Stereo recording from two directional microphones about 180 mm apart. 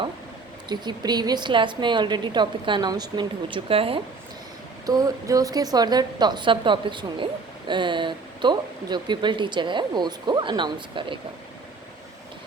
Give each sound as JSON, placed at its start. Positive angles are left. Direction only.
{"t": 0.7, "sound": "speech", "side_deg": -25}
{"t": 4.9, "sound": "speech", "side_deg": -20}